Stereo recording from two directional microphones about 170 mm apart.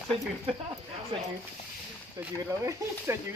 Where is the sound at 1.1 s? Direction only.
30° right (ahead or behind).